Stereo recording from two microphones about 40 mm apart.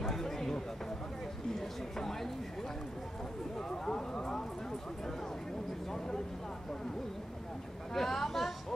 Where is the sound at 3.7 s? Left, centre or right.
Centre.